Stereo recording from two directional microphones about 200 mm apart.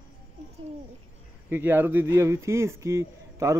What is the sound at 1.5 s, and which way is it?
Speech, 10° right (ahead or behind).